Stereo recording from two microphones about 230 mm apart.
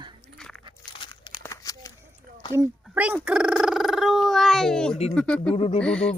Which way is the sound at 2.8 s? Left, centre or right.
Centre.